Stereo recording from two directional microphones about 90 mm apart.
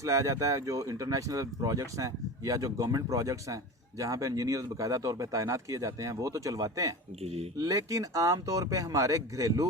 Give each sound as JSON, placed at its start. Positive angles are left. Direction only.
{"t": 0.0, "sound": "speech", "side_deg": -35}